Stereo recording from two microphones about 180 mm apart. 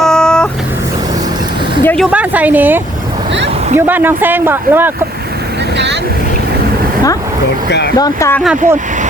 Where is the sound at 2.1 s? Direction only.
10° right (ahead or behind).